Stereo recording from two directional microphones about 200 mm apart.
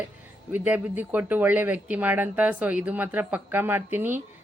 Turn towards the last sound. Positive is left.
turn(degrees=-10)  # may be behind; listen again after turning